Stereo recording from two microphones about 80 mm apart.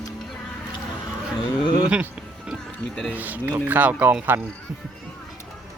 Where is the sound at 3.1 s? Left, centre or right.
Right.